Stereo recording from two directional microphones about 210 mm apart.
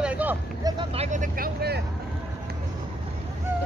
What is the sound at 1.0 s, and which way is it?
Vehicle, 40° right (ahead or behind).